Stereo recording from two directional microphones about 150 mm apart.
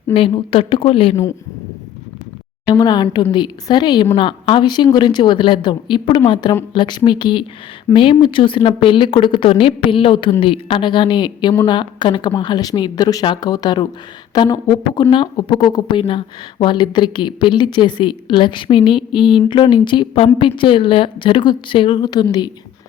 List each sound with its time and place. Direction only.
0.1 s a woman's voice: 40° left (ahead or behind)
2.6 s a woman's voice: 25° left (ahead or behind)